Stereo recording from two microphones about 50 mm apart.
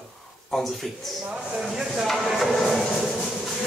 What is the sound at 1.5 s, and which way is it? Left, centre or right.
Speech, centre.